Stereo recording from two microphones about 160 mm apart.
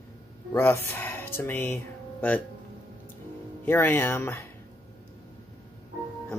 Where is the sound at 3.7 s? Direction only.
15° left (ahead or behind).